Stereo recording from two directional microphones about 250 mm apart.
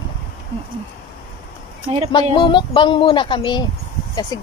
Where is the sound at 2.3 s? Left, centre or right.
Centre.